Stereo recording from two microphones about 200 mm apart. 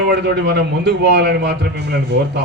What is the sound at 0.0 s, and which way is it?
A man's voice, 55° right (ahead or behind).